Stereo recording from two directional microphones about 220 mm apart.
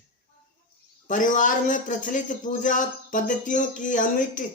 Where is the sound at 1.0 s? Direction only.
35° left (ahead or behind).